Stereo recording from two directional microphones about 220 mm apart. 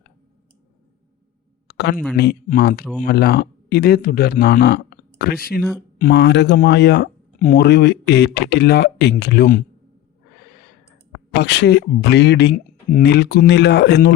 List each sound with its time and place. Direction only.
1.6 s a sound: 45° left (ahead or behind)
2.1 s speech: 45° left (ahead or behind)
11.4 s speech: 50° left (ahead or behind)